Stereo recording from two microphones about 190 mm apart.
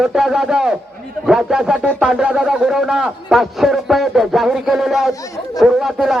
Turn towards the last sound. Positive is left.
turn(degrees=0)  # may be behind; listen again after turning